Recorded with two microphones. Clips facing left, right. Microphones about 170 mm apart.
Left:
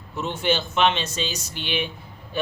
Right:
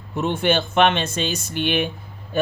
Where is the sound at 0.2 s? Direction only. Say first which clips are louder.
Right 4 dB; 55° right (ahead or behind).